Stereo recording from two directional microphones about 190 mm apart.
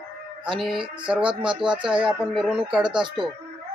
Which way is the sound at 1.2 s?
25° right (ahead or behind).